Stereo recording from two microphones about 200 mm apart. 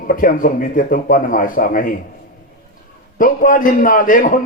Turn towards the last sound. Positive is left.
turn(degrees=40)  # may be behind; listen again after turning